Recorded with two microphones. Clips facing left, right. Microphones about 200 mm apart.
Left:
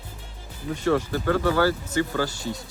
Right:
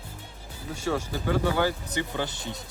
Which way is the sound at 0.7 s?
10° right (ahead or behind).